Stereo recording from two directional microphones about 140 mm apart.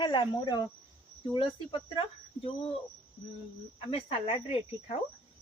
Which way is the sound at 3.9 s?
40° left (ahead or behind).